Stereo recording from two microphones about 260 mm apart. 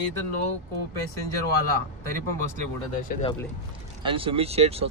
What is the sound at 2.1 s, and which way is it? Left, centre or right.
Speech, right.